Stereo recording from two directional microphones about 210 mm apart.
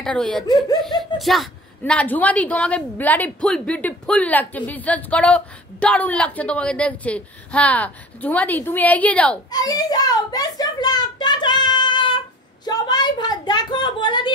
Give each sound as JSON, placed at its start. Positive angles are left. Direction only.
{"t": 0.0, "sound": "a woman's voice", "side_deg": 5}
{"t": 9.5, "sound": "a child's voice", "side_deg": 20}